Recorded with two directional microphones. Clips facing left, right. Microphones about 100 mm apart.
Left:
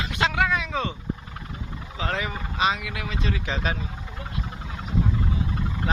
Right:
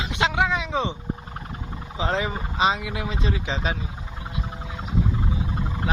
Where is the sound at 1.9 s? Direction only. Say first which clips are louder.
Right 3 dB; 25° right (ahead or behind).